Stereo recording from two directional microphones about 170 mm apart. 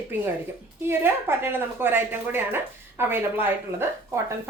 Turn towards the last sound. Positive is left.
turn(degrees=-10)  # may be behind; listen again after turning